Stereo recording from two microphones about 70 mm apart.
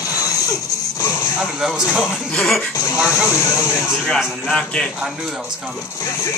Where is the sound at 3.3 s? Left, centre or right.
Left.